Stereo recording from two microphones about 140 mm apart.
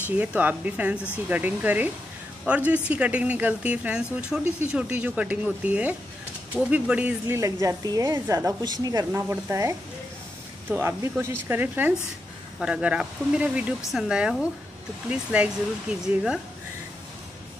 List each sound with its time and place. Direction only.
0.1 s speech: 10° right (ahead or behind)
7.3 s a woman's voice: 25° right (ahead or behind); by 16.3 s 5° right (ahead or behind)